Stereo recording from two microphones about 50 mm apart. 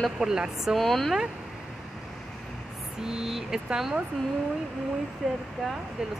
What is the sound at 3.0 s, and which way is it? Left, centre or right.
Speech, centre.